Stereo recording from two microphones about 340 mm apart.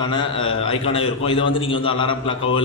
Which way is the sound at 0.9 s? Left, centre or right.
Centre.